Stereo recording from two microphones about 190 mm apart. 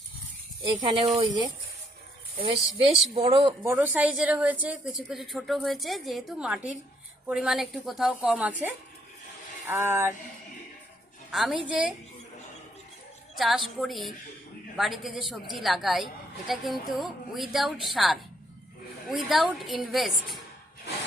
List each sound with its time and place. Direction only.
0.6 s speech: 25° right (ahead or behind)
3.6 s a woman's voice: 10° right (ahead or behind)
11.3 s a woman's voice: centre (ahead or behind)
13.3 s a woman's voice: centre (ahead or behind)